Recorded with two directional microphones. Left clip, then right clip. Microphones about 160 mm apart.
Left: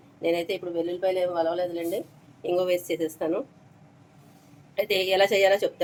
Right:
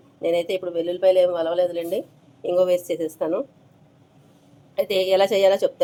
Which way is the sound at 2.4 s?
25° right (ahead or behind).